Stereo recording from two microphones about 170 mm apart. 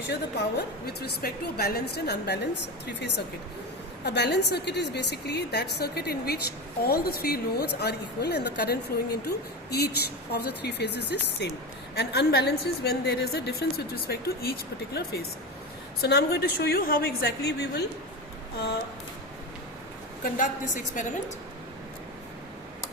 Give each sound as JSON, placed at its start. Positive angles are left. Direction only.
{"t": 0.1, "sound": "a woman's voice", "side_deg": 75}
{"t": 4.0, "sound": "a woman's voice", "side_deg": 80}
{"t": 20.3, "sound": "a woman's voice", "side_deg": 50}